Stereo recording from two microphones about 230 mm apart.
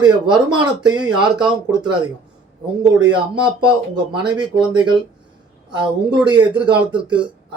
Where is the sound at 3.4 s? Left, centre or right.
Centre.